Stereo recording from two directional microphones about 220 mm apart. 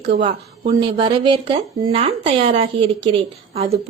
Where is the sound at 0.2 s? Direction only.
25° right (ahead or behind).